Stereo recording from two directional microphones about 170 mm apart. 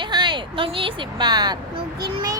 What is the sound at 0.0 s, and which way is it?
Speech, 25° right (ahead or behind).